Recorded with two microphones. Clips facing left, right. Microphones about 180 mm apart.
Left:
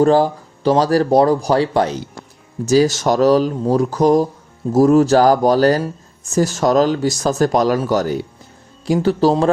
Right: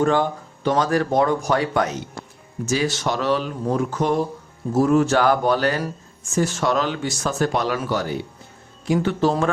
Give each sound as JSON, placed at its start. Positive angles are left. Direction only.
{"t": 0.0, "sound": "speech", "side_deg": 35}